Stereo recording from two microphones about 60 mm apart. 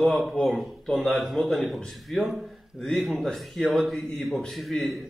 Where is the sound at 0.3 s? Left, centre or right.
Centre.